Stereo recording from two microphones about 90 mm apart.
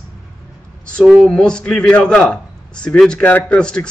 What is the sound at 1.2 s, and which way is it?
A man's voice, 10° left (ahead or behind).